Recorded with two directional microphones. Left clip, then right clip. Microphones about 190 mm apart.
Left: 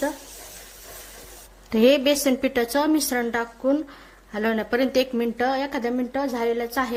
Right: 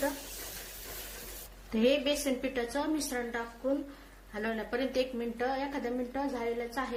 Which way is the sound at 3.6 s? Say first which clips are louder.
Left 8 dB; 65° left (ahead or behind).